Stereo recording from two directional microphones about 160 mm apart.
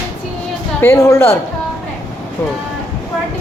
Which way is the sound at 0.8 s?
15° left (ahead or behind).